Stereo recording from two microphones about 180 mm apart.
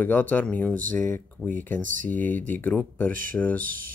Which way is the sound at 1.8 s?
45° right (ahead or behind).